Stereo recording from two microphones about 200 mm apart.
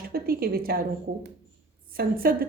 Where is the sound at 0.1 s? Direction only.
50° right (ahead or behind).